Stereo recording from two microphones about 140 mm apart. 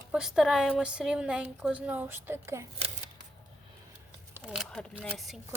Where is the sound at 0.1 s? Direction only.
5° right (ahead or behind).